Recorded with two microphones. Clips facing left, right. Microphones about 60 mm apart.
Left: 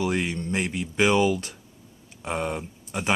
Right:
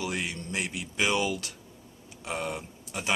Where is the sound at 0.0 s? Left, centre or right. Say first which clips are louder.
Left 7 dB; left.